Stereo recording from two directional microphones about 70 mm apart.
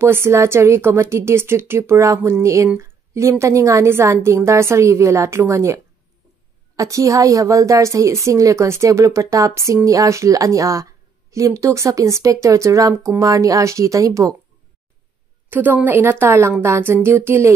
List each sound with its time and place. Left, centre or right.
0.0 s a woman's voice: right
6.8 s speech: right
15.5 s speech: right